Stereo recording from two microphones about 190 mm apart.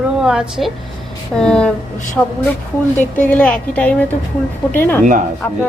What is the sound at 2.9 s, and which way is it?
Speech, 40° left (ahead or behind).